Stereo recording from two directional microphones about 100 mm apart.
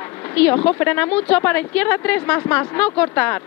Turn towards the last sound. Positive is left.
turn(degrees=15)  # may be behind; listen again after turning